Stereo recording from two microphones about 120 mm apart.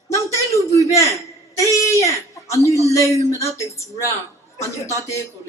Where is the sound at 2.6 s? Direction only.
25° left (ahead or behind).